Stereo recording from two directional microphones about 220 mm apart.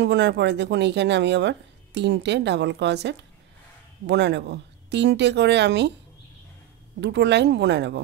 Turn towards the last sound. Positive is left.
turn(degrees=-50)  # may be behind; listen again after turning